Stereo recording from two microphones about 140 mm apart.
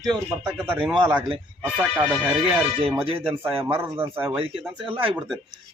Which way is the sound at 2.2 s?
10° right (ahead or behind).